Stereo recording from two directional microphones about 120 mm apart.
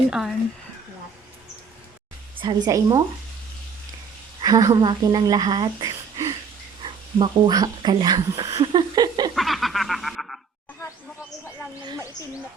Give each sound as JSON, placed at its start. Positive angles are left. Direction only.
{"t": 0.1, "sound": "speech", "side_deg": -5}
{"t": 2.4, "sound": "a woman's voice", "side_deg": -40}
{"t": 2.6, "sound": "speech", "side_deg": -30}
{"t": 4.4, "sound": "speech", "side_deg": -30}
{"t": 9.3, "sound": "a sound", "side_deg": 0}